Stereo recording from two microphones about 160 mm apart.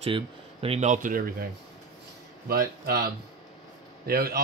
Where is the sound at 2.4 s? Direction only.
70° right (ahead or behind).